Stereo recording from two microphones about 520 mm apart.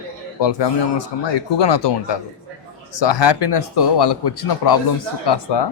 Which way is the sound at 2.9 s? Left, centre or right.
Left.